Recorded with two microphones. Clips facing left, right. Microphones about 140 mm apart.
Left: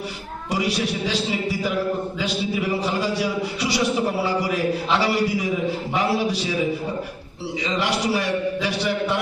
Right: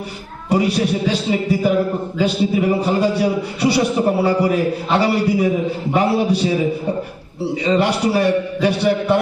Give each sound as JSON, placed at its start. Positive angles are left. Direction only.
{"t": 0.5, "sound": "a man's voice", "side_deg": -55}
{"t": 7.7, "sound": "a man's voice", "side_deg": -60}